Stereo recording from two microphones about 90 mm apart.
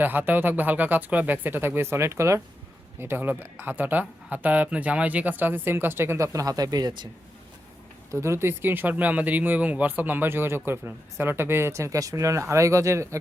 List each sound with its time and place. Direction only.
0.0 s speech: 20° right (ahead or behind); by 7.1 s 55° right (ahead or behind)
8.1 s speech: 30° right (ahead or behind)